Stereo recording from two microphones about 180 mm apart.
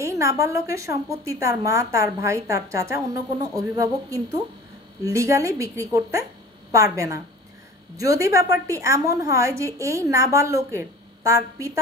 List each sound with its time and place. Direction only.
0.0 s a woman's voice: 15° right (ahead or behind)